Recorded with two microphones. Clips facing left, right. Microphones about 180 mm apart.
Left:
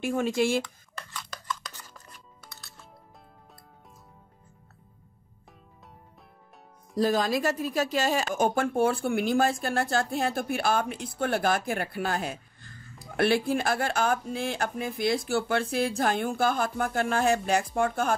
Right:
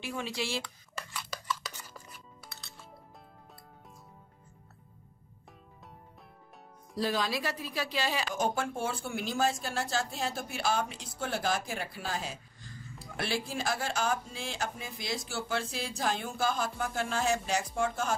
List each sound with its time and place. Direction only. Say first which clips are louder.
0.0 s speech: left 10 dB; 50° left (ahead or behind)
0.9 s music: even; 5° right (ahead or behind)
7.0 s speech: left 7 dB; 45° left (ahead or behind)